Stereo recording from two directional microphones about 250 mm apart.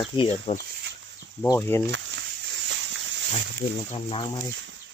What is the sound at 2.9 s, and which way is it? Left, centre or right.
Wild animals, right.